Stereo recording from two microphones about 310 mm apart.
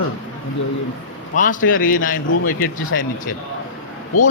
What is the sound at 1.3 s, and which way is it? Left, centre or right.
Speech, left.